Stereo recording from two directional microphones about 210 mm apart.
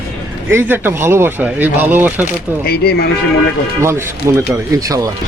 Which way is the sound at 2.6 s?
50° left (ahead or behind).